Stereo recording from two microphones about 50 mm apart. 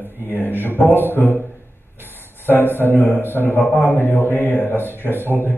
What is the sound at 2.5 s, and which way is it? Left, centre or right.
A man's voice, left.